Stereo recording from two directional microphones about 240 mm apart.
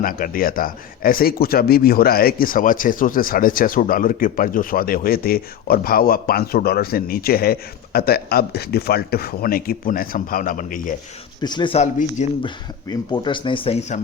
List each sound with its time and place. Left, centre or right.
0.0 s speech: left
11.3 s speech: centre
12.9 s speech: centre